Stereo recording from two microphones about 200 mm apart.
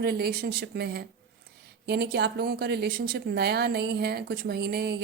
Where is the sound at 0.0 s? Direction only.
50° right (ahead or behind).